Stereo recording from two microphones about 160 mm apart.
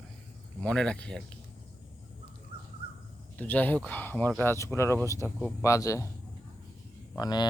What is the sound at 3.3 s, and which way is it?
Speech, 10° left (ahead or behind).